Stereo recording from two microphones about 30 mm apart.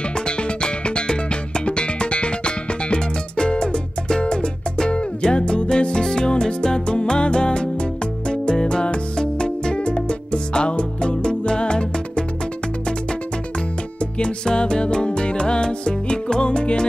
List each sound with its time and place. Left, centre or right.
0.4 s music: left
14.1 s music: left